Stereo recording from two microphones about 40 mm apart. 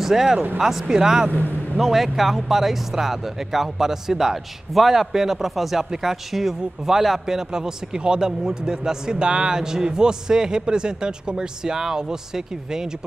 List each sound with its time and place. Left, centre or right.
0.0 s speech: centre